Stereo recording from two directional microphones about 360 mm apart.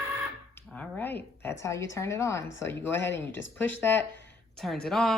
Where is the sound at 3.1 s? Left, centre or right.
Left.